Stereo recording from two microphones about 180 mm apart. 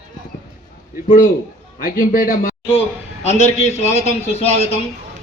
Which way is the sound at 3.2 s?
35° left (ahead or behind).